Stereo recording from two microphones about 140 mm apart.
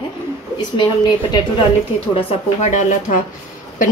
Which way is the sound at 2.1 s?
55° left (ahead or behind).